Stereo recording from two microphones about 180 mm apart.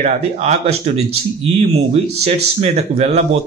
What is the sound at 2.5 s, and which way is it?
Speech, 35° right (ahead or behind).